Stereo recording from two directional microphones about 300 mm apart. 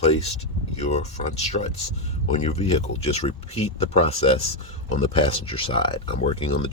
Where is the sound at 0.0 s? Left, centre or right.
Left.